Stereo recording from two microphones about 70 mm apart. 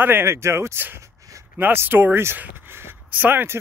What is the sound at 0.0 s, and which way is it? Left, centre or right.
Speech, right.